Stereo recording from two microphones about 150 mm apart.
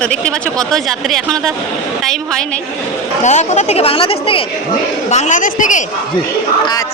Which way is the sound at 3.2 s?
50° left (ahead or behind).